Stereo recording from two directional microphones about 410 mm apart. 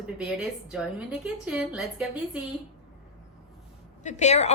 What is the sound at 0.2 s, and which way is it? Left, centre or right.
A woman's voice, centre.